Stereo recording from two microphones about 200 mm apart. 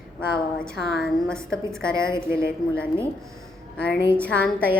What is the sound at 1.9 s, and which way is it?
Speech, 15° right (ahead or behind).